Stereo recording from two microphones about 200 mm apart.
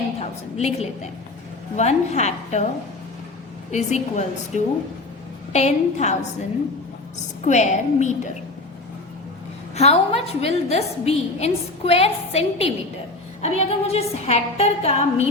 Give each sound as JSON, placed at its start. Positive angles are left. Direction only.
{"t": 0.2, "sound": "a woman's voice", "side_deg": 30}
{"t": 3.7, "sound": "a woman's voice", "side_deg": 35}
{"t": 7.4, "sound": "a woman's voice", "side_deg": 35}
{"t": 9.7, "sound": "a woman's voice", "side_deg": 30}